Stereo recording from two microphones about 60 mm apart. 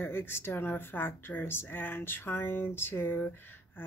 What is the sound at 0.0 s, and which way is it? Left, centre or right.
Speech, left.